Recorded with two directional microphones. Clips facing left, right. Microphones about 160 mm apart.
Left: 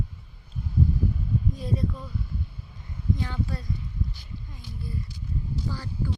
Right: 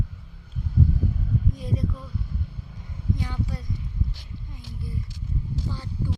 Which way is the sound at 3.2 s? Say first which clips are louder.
Even; 15° right (ahead or behind).